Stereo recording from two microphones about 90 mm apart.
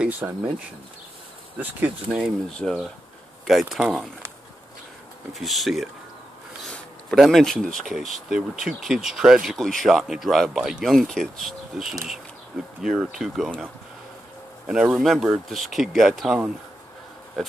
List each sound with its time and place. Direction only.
0.0 s speech: 15° right (ahead or behind)
1.6 s speech: 15° right (ahead or behind)
2.5 s speech: 10° left (ahead or behind)
5.3 s speech: centre (ahead or behind)
7.2 s speech: centre (ahead or behind)
9.6 s speech: 5° left (ahead or behind)
14.7 s speech: 10° right (ahead or behind)